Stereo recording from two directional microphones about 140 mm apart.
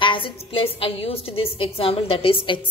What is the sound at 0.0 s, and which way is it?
A woman's voice, 35° left (ahead or behind).